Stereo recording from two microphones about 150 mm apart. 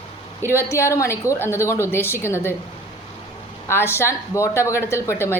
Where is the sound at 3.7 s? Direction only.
15° left (ahead or behind).